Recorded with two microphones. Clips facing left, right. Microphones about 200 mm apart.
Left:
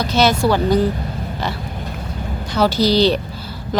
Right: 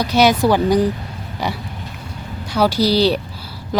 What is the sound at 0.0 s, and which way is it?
Speech, 10° right (ahead or behind).